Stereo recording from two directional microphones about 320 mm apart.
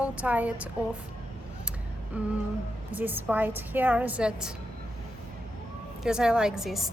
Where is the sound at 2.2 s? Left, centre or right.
Centre.